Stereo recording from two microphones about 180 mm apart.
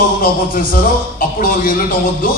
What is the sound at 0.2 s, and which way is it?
A man's voice, 50° left (ahead or behind).